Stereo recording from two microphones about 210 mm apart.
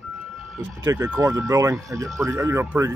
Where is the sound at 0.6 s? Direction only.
10° right (ahead or behind).